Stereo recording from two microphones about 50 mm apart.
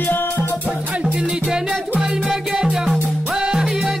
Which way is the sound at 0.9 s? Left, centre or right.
Right.